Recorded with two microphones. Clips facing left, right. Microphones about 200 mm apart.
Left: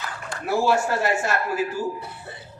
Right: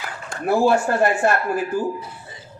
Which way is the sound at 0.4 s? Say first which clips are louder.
Right 4 dB; 55° right (ahead or behind).